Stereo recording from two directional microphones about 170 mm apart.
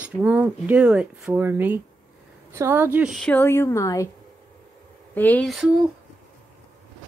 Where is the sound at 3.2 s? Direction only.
15° left (ahead or behind).